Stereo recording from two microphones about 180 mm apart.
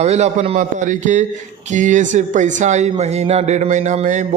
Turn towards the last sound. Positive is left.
turn(degrees=-40)  # may be behind; listen again after turning